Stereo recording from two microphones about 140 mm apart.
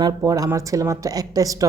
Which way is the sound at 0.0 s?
25° right (ahead or behind).